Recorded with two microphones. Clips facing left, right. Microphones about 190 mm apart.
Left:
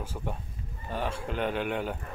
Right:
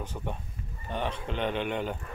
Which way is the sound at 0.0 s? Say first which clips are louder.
Even; 5° left (ahead or behind).